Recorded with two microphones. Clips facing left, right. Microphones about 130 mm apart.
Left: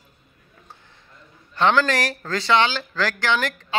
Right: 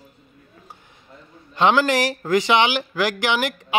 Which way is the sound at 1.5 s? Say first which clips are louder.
Right 2 dB; 15° right (ahead or behind).